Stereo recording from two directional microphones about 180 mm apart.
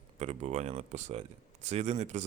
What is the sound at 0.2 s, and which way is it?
A man's voice, 40° right (ahead or behind).